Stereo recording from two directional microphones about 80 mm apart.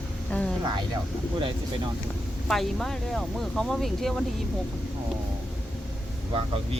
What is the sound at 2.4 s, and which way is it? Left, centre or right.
Speech, centre.